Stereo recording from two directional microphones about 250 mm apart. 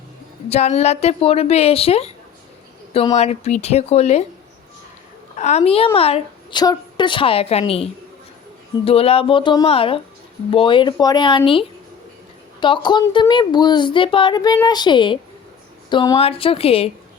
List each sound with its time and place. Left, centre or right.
0.4 s a woman's voice: left
5.4 s a woman's voice: left